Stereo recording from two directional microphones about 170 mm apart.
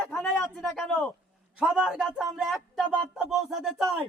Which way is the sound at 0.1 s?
5° left (ahead or behind).